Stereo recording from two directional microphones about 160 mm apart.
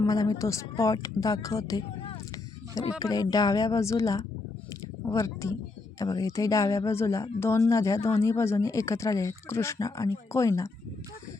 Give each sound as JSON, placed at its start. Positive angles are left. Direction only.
{"t": 0.0, "sound": "speech", "side_deg": 25}
{"t": 3.0, "sound": "speech", "side_deg": 25}